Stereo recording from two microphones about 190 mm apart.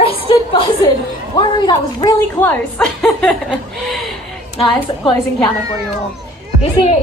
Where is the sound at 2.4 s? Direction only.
10° left (ahead or behind).